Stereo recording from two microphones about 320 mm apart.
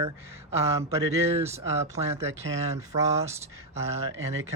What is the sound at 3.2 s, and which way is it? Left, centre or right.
Speech, centre.